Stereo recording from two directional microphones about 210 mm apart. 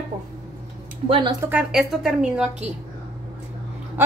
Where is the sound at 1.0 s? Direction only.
25° right (ahead or behind).